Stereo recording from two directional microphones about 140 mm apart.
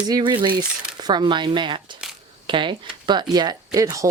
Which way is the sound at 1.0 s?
30° right (ahead or behind).